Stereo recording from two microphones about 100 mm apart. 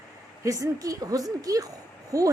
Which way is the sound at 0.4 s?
35° right (ahead or behind).